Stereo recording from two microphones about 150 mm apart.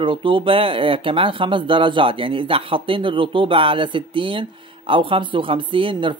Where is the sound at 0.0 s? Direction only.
35° right (ahead or behind).